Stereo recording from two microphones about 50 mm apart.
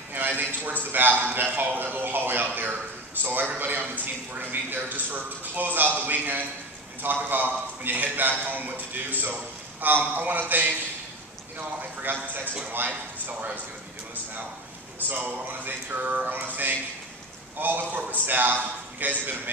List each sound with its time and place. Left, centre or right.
0.1 s a sound: right
1.2 s a man's voice: right
12.1 s a man's voice: right
15.0 s a man's voice: right